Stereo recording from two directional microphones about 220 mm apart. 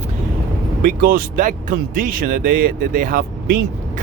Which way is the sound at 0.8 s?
40° right (ahead or behind).